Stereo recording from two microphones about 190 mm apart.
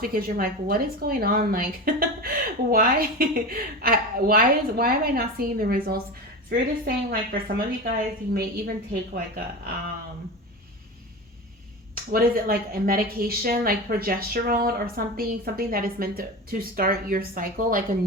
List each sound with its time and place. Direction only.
0.0 s a woman's voice: 50° right (ahead or behind)
12.1 s a woman's voice: 50° right (ahead or behind)